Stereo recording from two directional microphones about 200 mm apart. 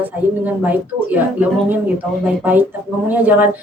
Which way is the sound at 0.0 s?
10° right (ahead or behind).